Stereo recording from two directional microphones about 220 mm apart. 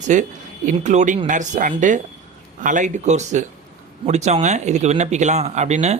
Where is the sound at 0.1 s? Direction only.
35° right (ahead or behind).